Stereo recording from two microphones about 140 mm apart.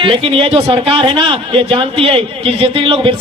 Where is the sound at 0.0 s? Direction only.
40° right (ahead or behind).